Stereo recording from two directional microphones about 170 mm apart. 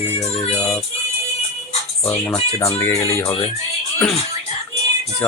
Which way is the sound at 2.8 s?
15° left (ahead or behind).